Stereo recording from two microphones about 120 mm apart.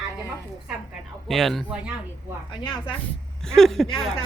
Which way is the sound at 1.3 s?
Centre (ahead or behind).